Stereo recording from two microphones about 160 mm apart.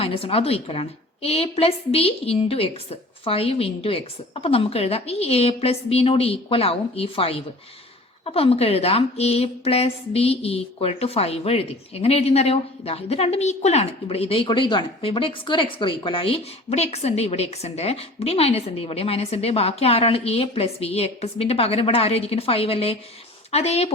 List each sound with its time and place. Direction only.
0.0 s speech: 35° left (ahead or behind)